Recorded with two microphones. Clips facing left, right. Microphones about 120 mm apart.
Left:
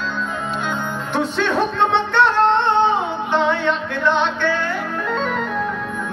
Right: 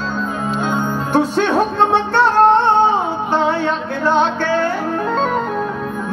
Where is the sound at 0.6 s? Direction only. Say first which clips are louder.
Right 5 dB; 40° right (ahead or behind).